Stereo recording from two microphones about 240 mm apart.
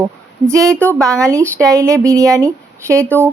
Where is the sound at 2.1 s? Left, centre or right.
Centre.